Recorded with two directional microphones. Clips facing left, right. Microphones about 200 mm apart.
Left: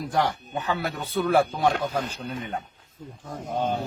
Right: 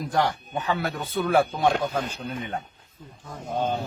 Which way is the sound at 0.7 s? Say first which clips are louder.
Right 1 dB; centre (ahead or behind).